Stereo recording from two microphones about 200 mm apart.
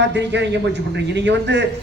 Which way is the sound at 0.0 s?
60° right (ahead or behind).